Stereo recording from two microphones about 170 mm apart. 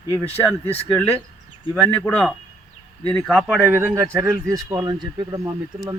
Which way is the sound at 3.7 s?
10° right (ahead or behind).